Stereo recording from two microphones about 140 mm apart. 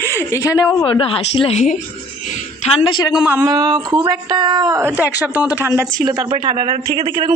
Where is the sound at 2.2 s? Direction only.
60° left (ahead or behind).